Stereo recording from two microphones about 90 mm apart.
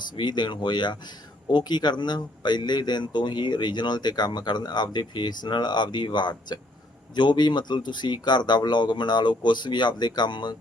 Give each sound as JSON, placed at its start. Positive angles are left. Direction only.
{"t": 0.2, "sound": "speech", "side_deg": 60}